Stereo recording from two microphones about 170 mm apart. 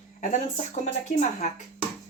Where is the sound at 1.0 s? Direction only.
45° left (ahead or behind).